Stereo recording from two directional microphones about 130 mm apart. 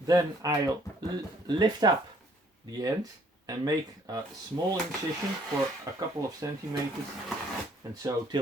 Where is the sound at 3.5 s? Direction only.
30° right (ahead or behind).